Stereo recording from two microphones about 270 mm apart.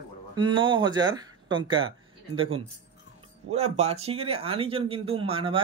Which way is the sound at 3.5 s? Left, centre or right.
Right.